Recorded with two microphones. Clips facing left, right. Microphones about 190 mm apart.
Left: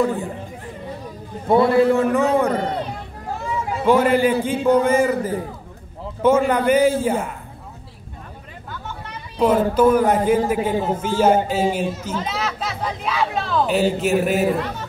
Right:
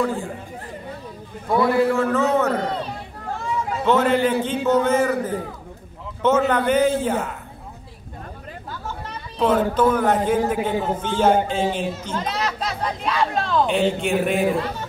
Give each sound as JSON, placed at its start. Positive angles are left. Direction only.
{"t": 1.5, "sound": "a man's voice", "side_deg": 25}
{"t": 3.8, "sound": "a man's voice", "side_deg": 10}
{"t": 9.4, "sound": "a man's voice", "side_deg": 10}